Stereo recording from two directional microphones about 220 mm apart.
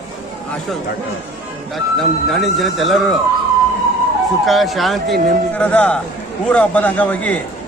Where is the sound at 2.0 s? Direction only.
Centre (ahead or behind).